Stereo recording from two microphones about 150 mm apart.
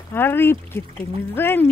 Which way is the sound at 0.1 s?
15° left (ahead or behind).